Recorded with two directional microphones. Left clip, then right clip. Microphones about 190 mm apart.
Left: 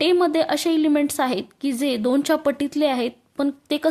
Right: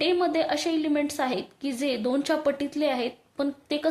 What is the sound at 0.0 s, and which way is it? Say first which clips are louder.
A woman's voice: left 5 dB; 35° left (ahead or behind).